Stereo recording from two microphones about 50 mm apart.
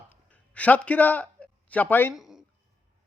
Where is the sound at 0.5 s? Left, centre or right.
Left.